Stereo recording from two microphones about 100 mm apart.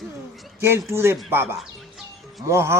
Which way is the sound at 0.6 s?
25° right (ahead or behind).